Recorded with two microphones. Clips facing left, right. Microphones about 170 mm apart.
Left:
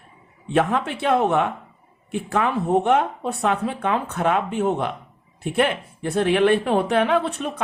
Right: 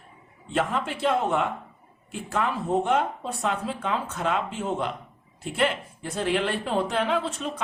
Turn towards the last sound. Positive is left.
turn(degrees=60)  # may be behind; listen again after turning